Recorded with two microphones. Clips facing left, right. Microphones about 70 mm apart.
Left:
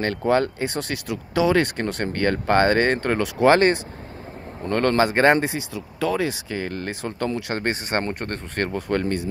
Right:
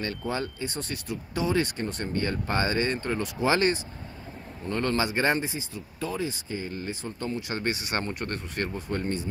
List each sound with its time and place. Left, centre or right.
0.3 s speech: left
3.5 s speech: left
4.6 s speech: left
7.5 s speech: left